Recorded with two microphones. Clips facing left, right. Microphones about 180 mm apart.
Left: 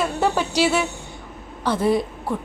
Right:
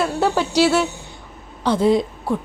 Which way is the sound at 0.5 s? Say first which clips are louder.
Right 6 dB; 10° left (ahead or behind).